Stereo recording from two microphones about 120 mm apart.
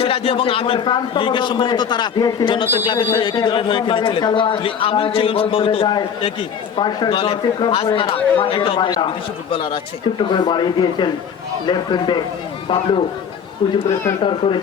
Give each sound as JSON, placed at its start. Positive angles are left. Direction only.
{"t": 0.0, "sound": "a man's voice", "side_deg": 50}
{"t": 6.7, "sound": "a man's voice", "side_deg": 40}
{"t": 14.2, "sound": "a man's voice", "side_deg": 45}